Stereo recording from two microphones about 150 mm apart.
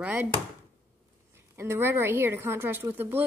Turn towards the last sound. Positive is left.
turn(degrees=-10)  # may be behind; listen again after turning